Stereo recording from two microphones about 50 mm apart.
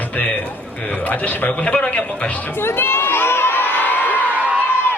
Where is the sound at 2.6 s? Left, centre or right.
Left.